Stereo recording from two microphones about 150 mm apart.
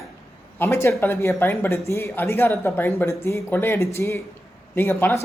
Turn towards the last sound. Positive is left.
turn(degrees=15)  # may be behind; listen again after turning